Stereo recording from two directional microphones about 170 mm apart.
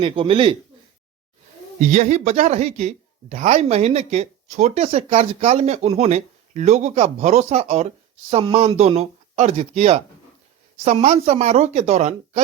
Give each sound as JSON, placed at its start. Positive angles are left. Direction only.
{"t": 0.0, "sound": "a woman's voice", "side_deg": -30}
{"t": 1.8, "sound": "a woman's voice", "side_deg": -45}